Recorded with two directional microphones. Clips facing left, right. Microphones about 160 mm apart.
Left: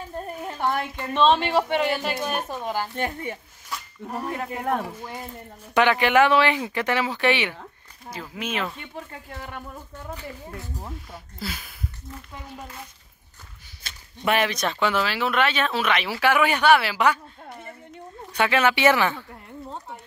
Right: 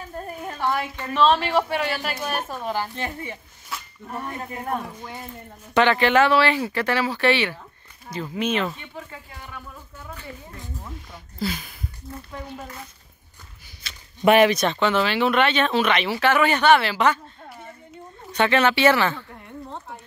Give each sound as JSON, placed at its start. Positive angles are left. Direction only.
{"t": 1.1, "sound": "speech", "side_deg": 25}
{"t": 2.2, "sound": "speech", "side_deg": 0}
{"t": 2.6, "sound": "speech", "side_deg": 10}
{"t": 3.0, "sound": "speech", "side_deg": 50}
{"t": 4.4, "sound": "speech", "side_deg": 80}
{"t": 5.8, "sound": "speech", "side_deg": 10}
{"t": 8.1, "sound": "speech", "side_deg": 5}
{"t": 9.1, "sound": "speech", "side_deg": 50}
{"t": 11.3, "sound": "speech", "side_deg": 5}
{"t": 13.9, "sound": "a sound", "side_deg": 45}
{"t": 14.2, "sound": "speech", "side_deg": -15}
{"t": 14.6, "sound": "speech", "side_deg": 5}
{"t": 18.3, "sound": "speech", "side_deg": 10}